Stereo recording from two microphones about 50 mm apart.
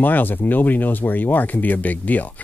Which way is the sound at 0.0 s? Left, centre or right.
Left.